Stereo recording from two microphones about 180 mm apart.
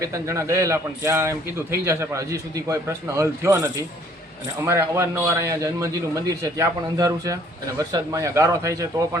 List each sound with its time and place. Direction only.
0.0 s a man's voice: 15° right (ahead or behind)